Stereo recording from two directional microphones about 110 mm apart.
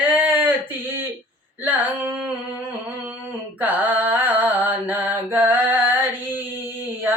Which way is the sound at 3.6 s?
15° right (ahead or behind).